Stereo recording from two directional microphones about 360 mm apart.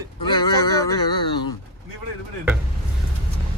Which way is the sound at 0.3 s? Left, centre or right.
Centre.